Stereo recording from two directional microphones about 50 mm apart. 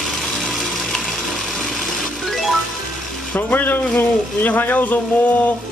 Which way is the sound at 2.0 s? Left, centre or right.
Centre.